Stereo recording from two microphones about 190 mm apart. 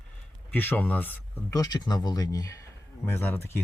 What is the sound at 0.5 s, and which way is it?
Speech, 10° left (ahead or behind).